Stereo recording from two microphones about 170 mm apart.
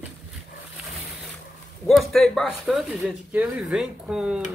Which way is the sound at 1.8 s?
Centre (ahead or behind).